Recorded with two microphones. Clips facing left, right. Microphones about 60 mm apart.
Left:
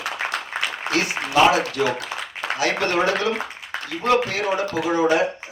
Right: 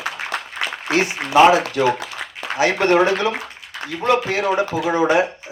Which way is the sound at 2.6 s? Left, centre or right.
Right.